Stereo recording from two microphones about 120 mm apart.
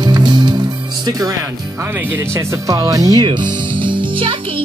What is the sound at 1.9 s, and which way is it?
Speech, 15° right (ahead or behind).